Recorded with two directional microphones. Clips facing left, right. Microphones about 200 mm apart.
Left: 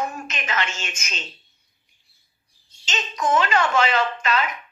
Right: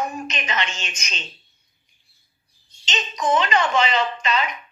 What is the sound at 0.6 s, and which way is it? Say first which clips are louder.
Speech: even; 5° left (ahead or behind).